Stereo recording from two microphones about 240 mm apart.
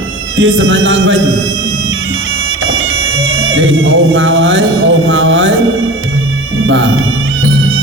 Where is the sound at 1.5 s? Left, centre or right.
Right.